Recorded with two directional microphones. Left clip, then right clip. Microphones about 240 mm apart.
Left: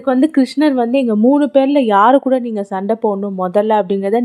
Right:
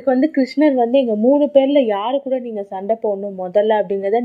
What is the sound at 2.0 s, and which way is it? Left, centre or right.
Speech, left.